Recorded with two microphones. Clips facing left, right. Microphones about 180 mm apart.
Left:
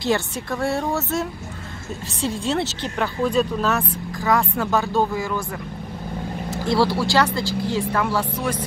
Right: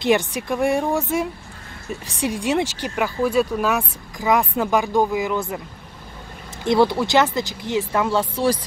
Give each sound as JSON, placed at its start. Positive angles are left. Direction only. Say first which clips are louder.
{"t": 0.0, "sound": "speech", "louder": "right 3 dB", "side_deg": -15}
{"t": 2.2, "sound": "speech", "louder": "right 2 dB", "side_deg": -15}
{"t": 6.6, "sound": "speech", "louder": "right 3 dB", "side_deg": -20}